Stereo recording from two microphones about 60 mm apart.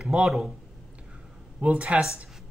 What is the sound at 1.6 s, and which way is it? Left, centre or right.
Speech, right.